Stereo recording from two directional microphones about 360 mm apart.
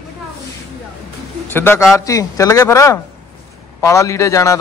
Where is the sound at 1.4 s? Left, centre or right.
Centre.